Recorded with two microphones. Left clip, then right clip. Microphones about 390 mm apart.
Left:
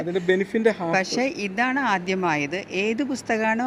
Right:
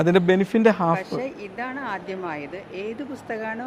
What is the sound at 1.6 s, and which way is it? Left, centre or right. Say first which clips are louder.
Speech: left 7 dB; left.